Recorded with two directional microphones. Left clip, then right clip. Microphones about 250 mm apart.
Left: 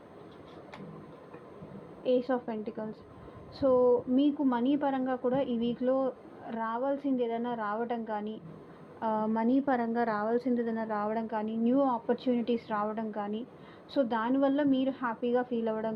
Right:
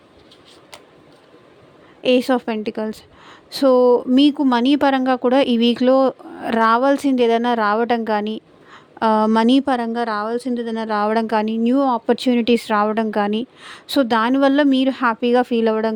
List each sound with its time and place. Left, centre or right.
2.0 s a woman's voice: right
10.8 s a woman's voice: right